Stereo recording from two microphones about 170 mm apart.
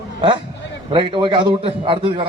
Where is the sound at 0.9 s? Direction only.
30° right (ahead or behind).